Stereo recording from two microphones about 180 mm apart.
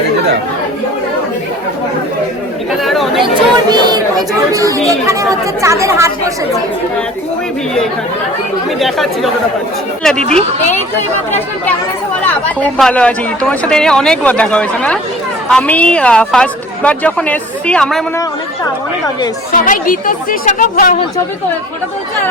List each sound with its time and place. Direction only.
2.8 s chatter: centre (ahead or behind)
3.7 s a sound: 25° right (ahead or behind)
4.5 s speech: 20° right (ahead or behind)
8.8 s speech: centre (ahead or behind)
12.5 s speech: 5° left (ahead or behind)
19.5 s speech: 50° left (ahead or behind)